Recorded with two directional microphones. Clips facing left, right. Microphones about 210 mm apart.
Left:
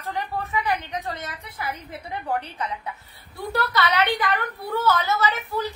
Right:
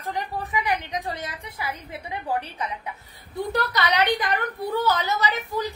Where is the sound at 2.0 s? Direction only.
10° right (ahead or behind).